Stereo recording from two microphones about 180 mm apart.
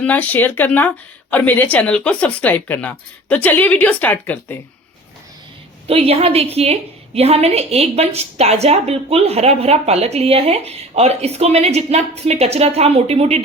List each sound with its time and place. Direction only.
0.0 s speech: 10° left (ahead or behind)
5.9 s a woman's voice: 35° right (ahead or behind)